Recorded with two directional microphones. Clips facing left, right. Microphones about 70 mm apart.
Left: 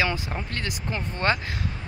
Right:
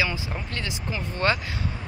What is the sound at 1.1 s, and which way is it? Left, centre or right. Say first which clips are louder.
Speech: right 1 dB; left.